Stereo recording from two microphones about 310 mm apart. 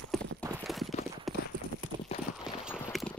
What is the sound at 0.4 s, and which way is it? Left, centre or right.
Clip-clop, centre.